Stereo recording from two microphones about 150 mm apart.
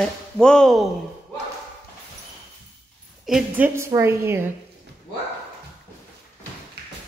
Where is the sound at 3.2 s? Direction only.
Centre (ahead or behind).